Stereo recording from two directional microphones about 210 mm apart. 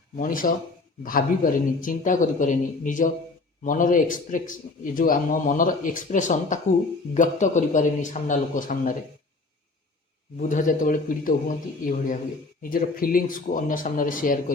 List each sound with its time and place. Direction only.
0.2 s speech: 40° left (ahead or behind)
10.3 s speech: 40° left (ahead or behind)